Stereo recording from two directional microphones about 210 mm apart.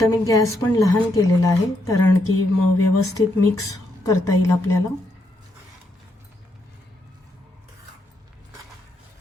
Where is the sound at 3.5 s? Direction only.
15° left (ahead or behind).